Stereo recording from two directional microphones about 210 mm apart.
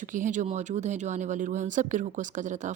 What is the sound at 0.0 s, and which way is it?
Speech, 40° right (ahead or behind).